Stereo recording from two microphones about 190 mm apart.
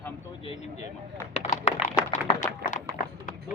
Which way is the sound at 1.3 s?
30° left (ahead or behind).